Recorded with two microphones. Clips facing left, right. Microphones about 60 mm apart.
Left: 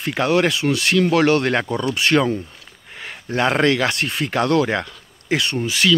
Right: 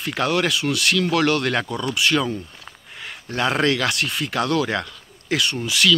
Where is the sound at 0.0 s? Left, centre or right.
Left.